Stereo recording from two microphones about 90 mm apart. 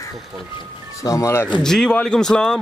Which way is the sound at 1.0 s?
35° left (ahead or behind).